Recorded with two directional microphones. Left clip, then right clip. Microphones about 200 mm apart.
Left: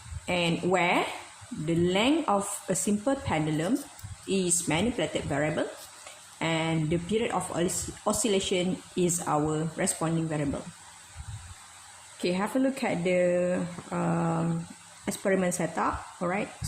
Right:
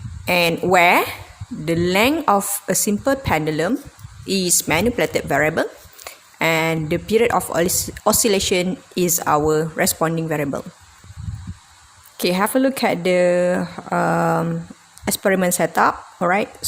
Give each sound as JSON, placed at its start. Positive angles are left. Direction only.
{"t": 0.3, "sound": "speech", "side_deg": -50}
{"t": 12.2, "sound": "speech", "side_deg": -55}